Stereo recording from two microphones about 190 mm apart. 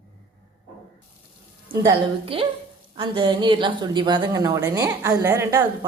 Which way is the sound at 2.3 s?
30° right (ahead or behind).